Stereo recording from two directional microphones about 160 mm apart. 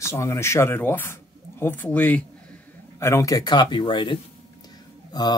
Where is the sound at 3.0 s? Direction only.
20° left (ahead or behind).